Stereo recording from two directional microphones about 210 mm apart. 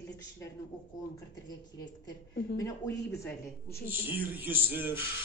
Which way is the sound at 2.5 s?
15° left (ahead or behind).